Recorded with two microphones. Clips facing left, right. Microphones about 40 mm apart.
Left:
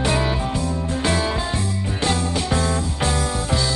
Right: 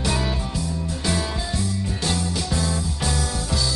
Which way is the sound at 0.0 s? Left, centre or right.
Left.